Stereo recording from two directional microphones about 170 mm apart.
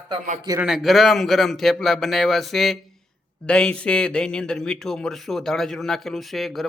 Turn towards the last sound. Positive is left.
turn(degrees=0)  # may be behind; listen again after turning